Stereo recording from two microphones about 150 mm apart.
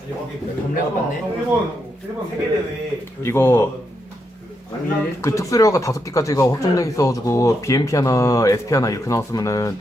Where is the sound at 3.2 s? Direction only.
15° left (ahead or behind).